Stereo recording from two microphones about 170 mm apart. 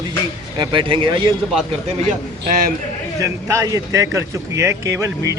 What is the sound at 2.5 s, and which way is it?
Speech, 55° right (ahead or behind).